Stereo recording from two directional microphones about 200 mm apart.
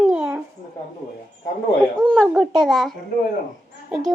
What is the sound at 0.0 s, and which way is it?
Babbling, 5° right (ahead or behind).